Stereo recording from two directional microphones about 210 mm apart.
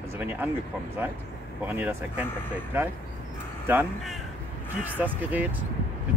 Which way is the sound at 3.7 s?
10° right (ahead or behind).